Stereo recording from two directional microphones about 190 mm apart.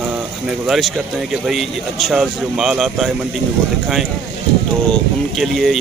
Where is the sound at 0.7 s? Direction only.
Centre (ahead or behind).